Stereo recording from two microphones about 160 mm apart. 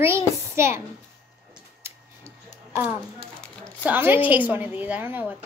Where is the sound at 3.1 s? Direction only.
5° left (ahead or behind).